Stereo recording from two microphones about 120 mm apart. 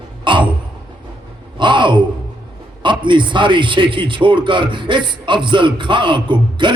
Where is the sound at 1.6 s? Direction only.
40° right (ahead or behind).